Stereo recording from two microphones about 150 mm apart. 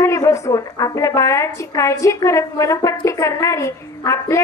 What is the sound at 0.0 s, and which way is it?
A woman's voice, 20° left (ahead or behind).